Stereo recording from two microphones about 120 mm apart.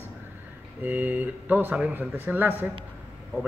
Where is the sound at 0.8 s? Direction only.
15° right (ahead or behind).